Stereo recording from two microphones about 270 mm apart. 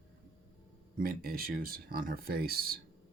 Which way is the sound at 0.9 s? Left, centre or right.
Right.